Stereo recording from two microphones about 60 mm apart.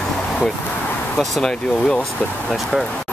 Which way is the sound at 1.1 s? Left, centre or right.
Centre.